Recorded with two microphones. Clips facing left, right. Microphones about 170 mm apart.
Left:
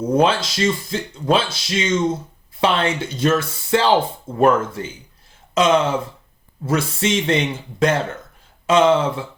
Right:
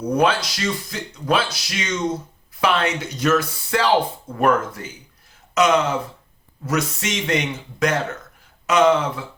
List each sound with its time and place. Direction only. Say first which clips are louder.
0.0 s speech: left 2 dB; 25° left (ahead or behind)